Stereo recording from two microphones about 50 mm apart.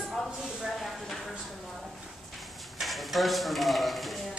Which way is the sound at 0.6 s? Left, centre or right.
Centre.